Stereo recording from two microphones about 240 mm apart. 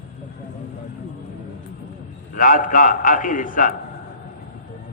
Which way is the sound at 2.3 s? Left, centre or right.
Left.